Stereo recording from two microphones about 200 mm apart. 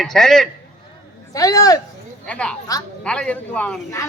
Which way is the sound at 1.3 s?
15° left (ahead or behind).